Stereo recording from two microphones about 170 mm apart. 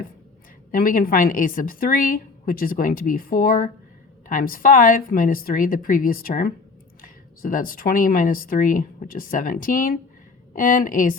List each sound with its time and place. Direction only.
0.7 s speech: 55° left (ahead or behind)